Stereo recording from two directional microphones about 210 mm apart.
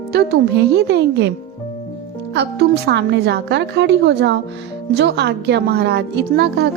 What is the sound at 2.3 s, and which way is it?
A woman's voice, 55° right (ahead or behind).